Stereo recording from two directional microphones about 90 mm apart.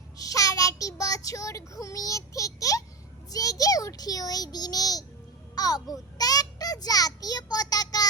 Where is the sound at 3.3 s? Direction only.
40° left (ahead or behind).